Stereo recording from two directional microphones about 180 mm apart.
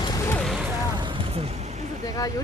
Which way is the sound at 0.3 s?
5° left (ahead or behind).